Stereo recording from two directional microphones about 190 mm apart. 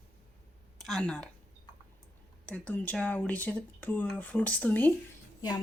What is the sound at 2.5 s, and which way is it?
Speech, 5° left (ahead or behind).